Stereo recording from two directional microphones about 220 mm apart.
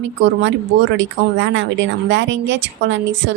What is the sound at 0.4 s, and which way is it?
Speech, 55° right (ahead or behind).